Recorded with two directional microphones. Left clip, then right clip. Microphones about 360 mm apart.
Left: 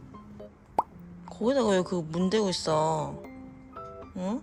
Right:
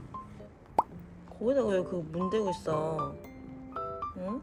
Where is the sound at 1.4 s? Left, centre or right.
Centre.